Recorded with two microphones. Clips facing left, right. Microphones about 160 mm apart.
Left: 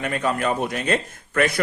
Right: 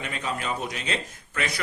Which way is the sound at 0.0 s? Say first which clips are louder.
Left 8 dB; 55° left (ahead or behind).